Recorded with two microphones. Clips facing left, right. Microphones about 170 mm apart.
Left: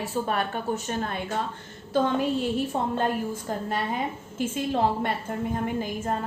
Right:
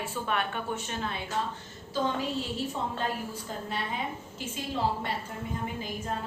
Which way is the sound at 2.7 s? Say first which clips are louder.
Left 6 dB; 55° left (ahead or behind).